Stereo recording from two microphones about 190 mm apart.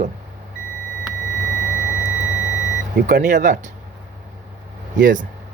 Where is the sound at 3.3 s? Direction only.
40° right (ahead or behind).